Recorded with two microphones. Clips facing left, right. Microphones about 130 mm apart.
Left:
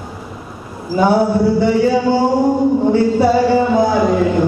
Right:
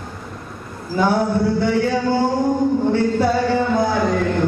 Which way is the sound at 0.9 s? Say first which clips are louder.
Left 5 dB; 25° left (ahead or behind).